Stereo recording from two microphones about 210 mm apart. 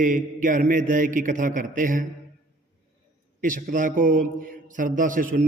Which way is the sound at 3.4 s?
40° right (ahead or behind).